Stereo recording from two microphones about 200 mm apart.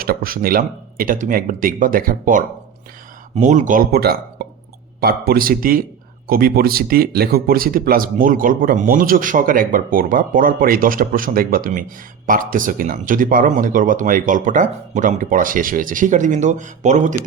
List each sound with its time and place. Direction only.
0.0 s speech: 45° right (ahead or behind)